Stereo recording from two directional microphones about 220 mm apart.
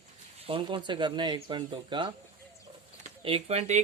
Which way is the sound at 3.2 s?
25° right (ahead or behind).